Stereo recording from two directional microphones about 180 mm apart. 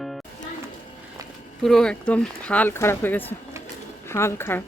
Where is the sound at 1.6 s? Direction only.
5° left (ahead or behind).